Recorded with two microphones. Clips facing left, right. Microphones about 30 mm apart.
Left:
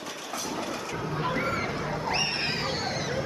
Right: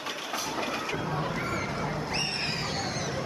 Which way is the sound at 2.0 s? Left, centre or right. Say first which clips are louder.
Left 3 dB; centre.